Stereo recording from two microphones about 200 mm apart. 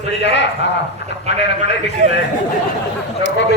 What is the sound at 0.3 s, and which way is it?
A man's voice, 60° left (ahead or behind).